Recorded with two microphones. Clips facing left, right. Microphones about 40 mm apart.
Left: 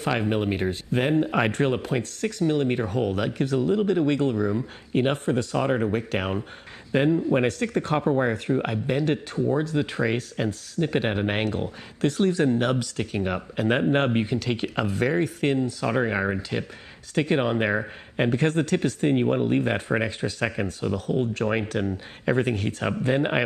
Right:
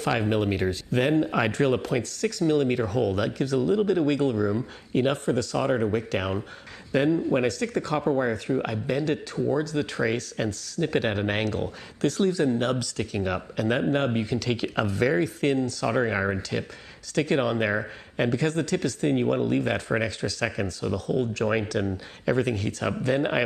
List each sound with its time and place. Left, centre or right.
0.0 s speech: centre
1.2 s a man's voice: left
5.6 s speech: centre; by 7.2 s left
7.2 s speech: centre
7.4 s a man's voice: left
9.8 s a man's voice: centre
13.6 s a man's voice: left
14.6 s speech: centre
17.1 s a man's voice: centre
22.2 s a man's voice: left
23.0 s a man's voice: centre